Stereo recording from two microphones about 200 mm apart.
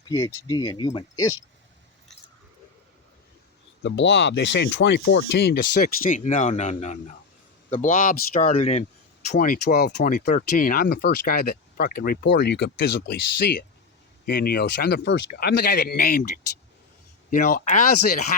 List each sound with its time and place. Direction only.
0.1 s speech: 15° left (ahead or behind)
3.8 s speech: 60° left (ahead or behind); by 8.4 s 45° left (ahead or behind)
8.4 s speech: 30° left (ahead or behind)
9.3 s speech: 45° left (ahead or behind)
14.3 s speech: 50° left (ahead or behind)